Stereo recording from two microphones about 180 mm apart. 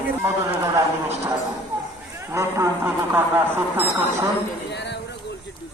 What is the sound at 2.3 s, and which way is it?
A man's voice, 15° right (ahead or behind).